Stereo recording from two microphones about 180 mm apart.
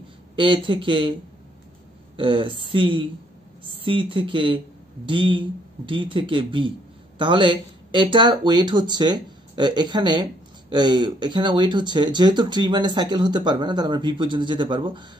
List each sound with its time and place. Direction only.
0.4 s speech: 25° right (ahead or behind)
2.1 s speech: 30° right (ahead or behind)